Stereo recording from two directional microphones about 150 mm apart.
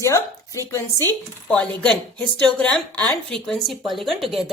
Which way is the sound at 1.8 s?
10° left (ahead or behind).